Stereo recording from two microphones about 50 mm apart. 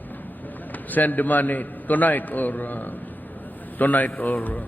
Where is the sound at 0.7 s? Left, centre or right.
Left.